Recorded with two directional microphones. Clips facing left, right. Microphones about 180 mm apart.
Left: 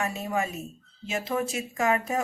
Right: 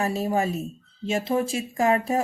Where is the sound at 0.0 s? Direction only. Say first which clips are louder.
Right 5 dB; 35° right (ahead or behind).